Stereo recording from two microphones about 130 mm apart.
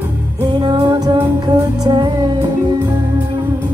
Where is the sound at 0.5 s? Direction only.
35° right (ahead or behind).